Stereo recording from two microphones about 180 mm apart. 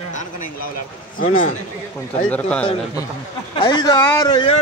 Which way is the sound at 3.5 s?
25° left (ahead or behind).